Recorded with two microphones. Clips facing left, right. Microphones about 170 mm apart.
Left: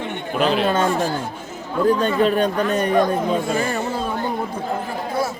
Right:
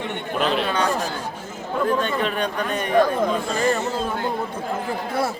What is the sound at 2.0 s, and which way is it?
Speech, 40° left (ahead or behind).